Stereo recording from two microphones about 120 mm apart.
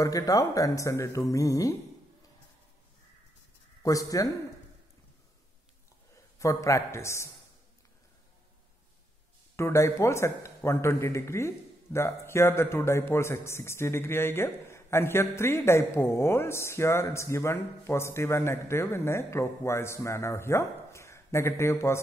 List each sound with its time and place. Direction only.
0.0 s speech: 30° left (ahead or behind)
3.8 s speech: 30° left (ahead or behind)
6.3 s speech: 25° left (ahead or behind)
9.6 s speech: 25° left (ahead or behind)